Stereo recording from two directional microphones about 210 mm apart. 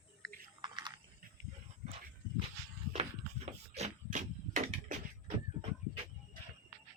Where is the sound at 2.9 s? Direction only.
30° right (ahead or behind).